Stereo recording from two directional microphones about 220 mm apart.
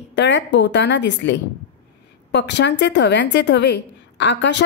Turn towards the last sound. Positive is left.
turn(degrees=50)  # may be behind; listen again after turning